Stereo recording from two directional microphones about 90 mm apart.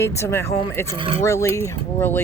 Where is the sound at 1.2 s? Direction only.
30° left (ahead or behind).